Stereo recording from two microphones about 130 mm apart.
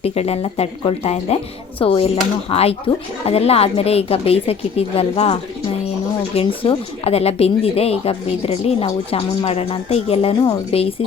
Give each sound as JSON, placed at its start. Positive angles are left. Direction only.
{"t": 0.0, "sound": "speech", "side_deg": 50}